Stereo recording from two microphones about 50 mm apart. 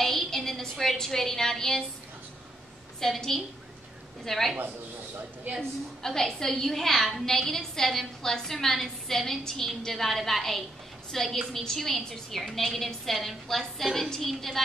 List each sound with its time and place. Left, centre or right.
0.0 s a sound: centre
3.0 s a woman's voice: centre
5.6 s a woman's voice: centre